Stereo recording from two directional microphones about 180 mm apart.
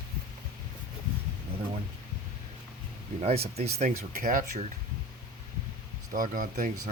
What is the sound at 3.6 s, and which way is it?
Speech, 35° right (ahead or behind).